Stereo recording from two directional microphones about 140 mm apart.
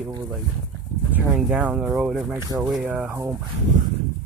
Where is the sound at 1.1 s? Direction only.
10° right (ahead or behind).